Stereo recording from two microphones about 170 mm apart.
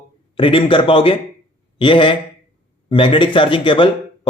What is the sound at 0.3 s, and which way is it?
A man's voice, 30° left (ahead or behind).